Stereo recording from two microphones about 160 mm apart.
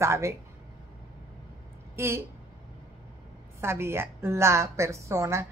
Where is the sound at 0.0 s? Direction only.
15° right (ahead or behind).